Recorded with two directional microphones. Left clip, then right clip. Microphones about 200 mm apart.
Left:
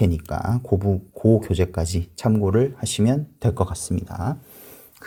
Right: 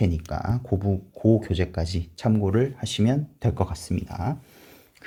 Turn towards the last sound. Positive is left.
turn(degrees=20)  # may be behind; listen again after turning